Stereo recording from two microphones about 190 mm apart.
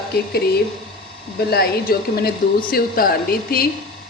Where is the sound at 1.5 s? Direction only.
55° left (ahead or behind).